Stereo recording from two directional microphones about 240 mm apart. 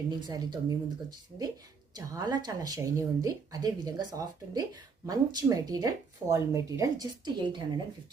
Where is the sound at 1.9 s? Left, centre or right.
Centre.